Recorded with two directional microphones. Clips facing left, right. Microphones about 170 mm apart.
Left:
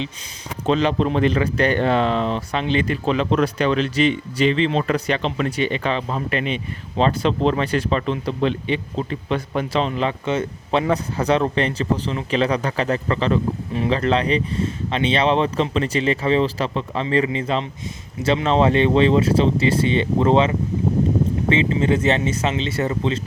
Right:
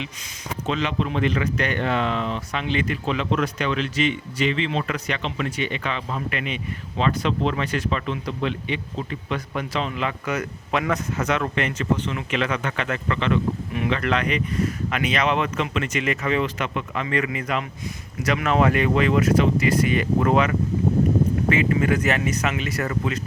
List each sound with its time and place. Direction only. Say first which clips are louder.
0.6 s speech: left 7 dB; 35° left (ahead or behind)